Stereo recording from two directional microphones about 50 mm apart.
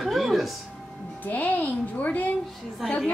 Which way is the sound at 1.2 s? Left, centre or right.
Left.